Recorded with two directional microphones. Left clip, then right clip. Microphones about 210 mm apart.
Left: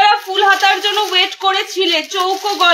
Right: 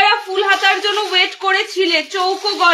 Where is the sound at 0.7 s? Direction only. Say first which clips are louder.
Left 1 dB; 25° left (ahead or behind).